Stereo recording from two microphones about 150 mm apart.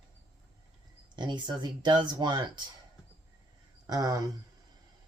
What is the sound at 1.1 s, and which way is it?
Speech, 30° right (ahead or behind).